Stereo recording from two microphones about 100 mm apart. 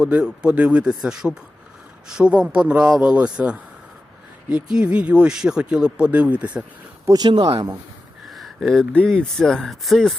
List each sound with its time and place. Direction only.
0.0 s speech: 10° right (ahead or behind)
7.0 s speech: 40° right (ahead or behind)
8.3 s speech: centre (ahead or behind)